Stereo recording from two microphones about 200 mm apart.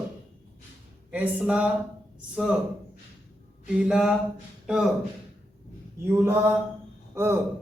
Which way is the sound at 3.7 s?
5° right (ahead or behind).